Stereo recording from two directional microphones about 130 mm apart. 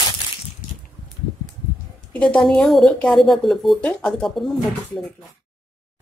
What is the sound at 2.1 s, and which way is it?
Speech, 10° left (ahead or behind).